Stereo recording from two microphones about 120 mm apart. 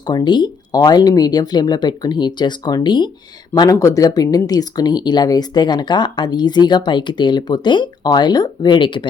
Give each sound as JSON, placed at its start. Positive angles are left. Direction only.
{"t": 0.0, "sound": "speech", "side_deg": 35}